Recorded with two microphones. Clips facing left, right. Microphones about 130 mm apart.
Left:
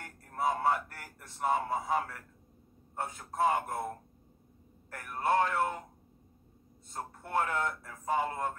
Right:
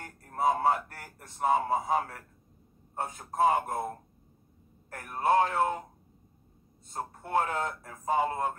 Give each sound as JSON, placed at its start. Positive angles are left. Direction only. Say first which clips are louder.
{"t": 0.5, "sound": "a sound", "louder": "right 3 dB", "side_deg": -25}
{"t": 1.4, "sound": "speech", "louder": "right 4 dB", "side_deg": -20}
{"t": 4.9, "sound": "speech", "louder": "right 4 dB", "side_deg": -25}
{"t": 6.9, "sound": "speech", "louder": "right 4 dB", "side_deg": -25}